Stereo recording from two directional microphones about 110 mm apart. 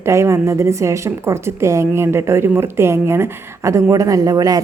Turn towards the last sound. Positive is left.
turn(degrees=-35)  # may be behind; listen again after turning